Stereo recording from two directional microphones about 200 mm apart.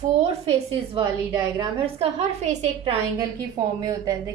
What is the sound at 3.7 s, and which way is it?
Speech, 15° right (ahead or behind).